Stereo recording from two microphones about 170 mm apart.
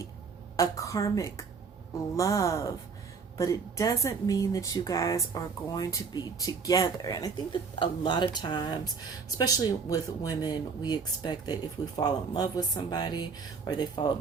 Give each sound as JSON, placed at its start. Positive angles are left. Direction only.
{"t": 0.5, "sound": "speech", "side_deg": 20}